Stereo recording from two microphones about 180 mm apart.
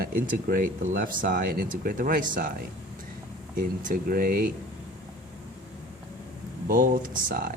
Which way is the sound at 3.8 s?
50° right (ahead or behind).